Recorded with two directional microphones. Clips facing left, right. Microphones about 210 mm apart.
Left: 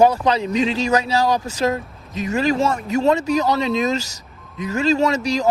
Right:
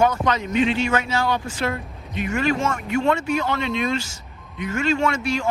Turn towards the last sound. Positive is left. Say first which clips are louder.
# left 3 dB
turn(degrees=35)  # may be behind; listen again after turning